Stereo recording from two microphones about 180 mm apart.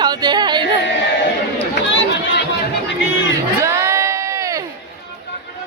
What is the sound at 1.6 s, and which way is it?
Run, 75° left (ahead or behind).